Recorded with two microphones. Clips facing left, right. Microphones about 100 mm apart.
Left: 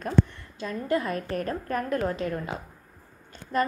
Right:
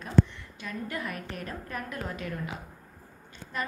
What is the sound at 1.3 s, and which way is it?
A woman's voice, 40° left (ahead or behind).